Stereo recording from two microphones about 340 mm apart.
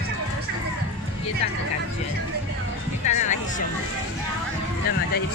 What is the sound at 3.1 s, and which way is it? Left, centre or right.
Speech, left.